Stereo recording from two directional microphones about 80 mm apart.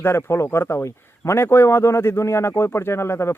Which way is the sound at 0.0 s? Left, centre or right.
Left.